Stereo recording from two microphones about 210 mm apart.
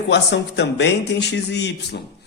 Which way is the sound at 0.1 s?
55° left (ahead or behind).